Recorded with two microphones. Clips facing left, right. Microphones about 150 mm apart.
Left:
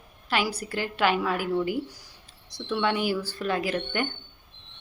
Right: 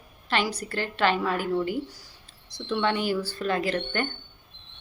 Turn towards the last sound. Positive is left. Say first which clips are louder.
# right 1 dB
turn(degrees=10)  # may be behind; listen again after turning